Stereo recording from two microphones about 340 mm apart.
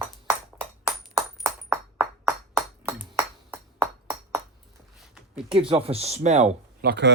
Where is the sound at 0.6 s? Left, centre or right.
Centre.